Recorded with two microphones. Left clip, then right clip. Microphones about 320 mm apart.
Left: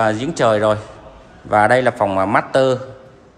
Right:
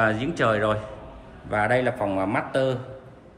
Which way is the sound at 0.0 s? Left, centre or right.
Centre.